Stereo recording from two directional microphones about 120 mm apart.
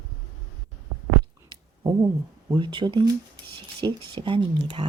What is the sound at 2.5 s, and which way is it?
Speech, 40° right (ahead or behind).